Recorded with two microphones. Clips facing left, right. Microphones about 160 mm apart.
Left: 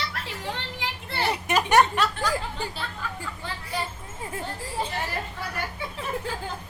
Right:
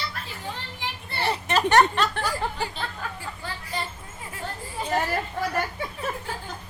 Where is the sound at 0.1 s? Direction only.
80° left.